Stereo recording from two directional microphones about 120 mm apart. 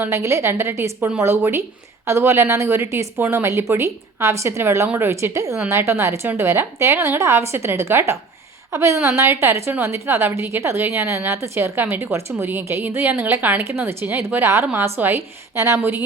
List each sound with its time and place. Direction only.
0.0 s a woman's voice: 25° right (ahead or behind)